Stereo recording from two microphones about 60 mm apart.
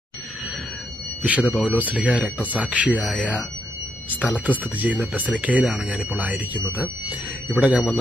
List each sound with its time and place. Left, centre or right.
1.2 s speech: right